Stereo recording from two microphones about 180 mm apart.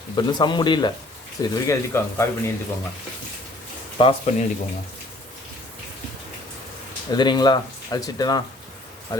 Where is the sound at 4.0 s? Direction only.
35° left (ahead or behind).